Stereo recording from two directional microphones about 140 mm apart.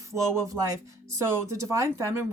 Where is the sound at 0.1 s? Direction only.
20° right (ahead or behind).